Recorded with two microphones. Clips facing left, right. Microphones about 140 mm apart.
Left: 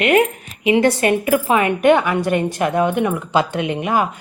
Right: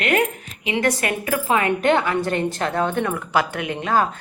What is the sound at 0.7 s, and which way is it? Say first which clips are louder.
A woman's voice: left 7 dB; 30° left (ahead or behind).